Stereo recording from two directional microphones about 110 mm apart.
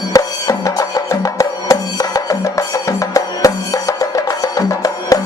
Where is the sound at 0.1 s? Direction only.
35° left (ahead or behind).